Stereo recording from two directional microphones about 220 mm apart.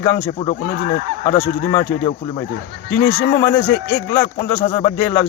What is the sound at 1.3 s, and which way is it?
Speech, 15° left (ahead or behind).